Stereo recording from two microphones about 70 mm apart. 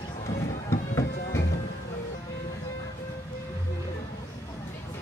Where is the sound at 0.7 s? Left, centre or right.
Left.